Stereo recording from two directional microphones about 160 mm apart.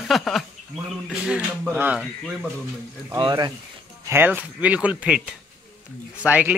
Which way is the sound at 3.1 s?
25° right (ahead or behind).